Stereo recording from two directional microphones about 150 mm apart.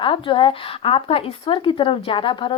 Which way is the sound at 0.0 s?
35° left (ahead or behind).